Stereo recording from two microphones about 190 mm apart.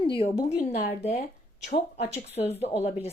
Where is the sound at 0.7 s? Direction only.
60° left (ahead or behind).